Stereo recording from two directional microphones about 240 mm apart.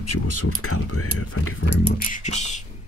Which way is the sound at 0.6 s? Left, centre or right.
Left.